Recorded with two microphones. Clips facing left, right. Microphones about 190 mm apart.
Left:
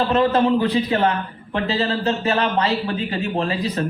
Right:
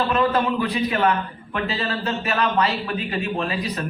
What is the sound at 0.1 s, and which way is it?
A man's voice, 30° left (ahead or behind).